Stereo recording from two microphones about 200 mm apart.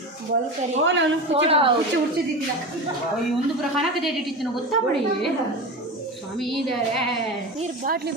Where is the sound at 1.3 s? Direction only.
30° right (ahead or behind).